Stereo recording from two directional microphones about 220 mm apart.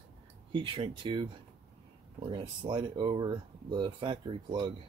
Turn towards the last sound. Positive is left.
turn(degrees=-20)  # may be behind; listen again after turning